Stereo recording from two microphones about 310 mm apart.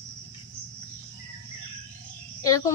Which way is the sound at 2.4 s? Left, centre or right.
Centre.